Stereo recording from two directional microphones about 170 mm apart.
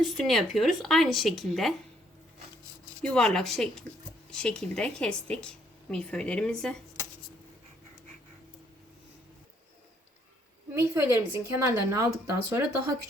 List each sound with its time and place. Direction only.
0.0 s a woman's voice: centre (ahead or behind)
3.0 s a woman's voice: 5° left (ahead or behind)
10.7 s a woman's voice: 15° right (ahead or behind)